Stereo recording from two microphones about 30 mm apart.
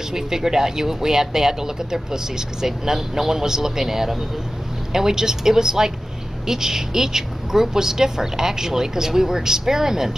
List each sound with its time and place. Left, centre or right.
0.1 s speech: centre